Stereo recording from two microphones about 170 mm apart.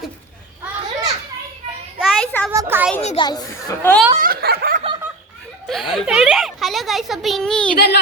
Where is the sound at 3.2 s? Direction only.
25° left (ahead or behind).